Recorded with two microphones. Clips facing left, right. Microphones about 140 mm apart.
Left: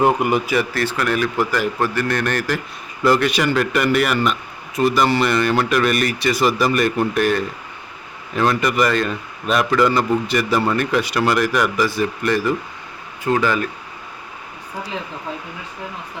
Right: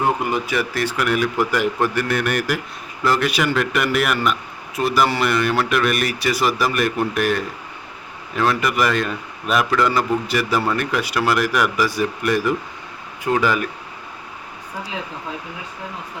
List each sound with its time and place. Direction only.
0.0 s speech: 15° left (ahead or behind)
0.7 s speech: 10° right (ahead or behind)